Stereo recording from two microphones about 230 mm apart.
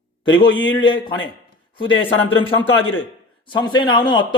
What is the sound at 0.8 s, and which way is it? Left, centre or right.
Speech, centre.